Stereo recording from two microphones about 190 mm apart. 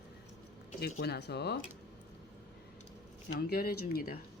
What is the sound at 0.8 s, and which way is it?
Speech, 55° left (ahead or behind).